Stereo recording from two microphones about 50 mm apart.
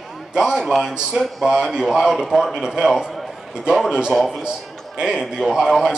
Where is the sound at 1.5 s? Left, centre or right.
Centre.